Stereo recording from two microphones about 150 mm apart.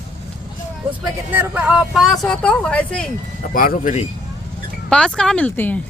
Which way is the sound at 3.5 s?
70° left (ahead or behind).